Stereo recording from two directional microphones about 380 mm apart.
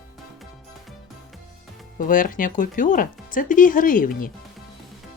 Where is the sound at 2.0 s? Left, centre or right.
Left.